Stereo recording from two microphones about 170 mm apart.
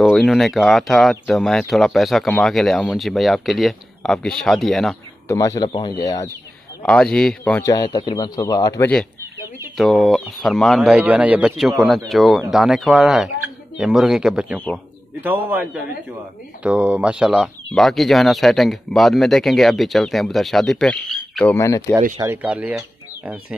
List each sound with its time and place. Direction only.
0.0 s speech: centre (ahead or behind)
5.3 s a man's voice: 20° left (ahead or behind)
6.8 s speech: 5° left (ahead or behind)
7.6 s a man's voice: 25° left (ahead or behind)
9.8 s a man's voice: centre (ahead or behind)
21.5 s speech: 15° left (ahead or behind)
22.2 s speech: 10° right (ahead or behind)